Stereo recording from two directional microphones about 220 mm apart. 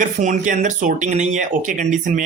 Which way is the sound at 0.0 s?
35° right (ahead or behind).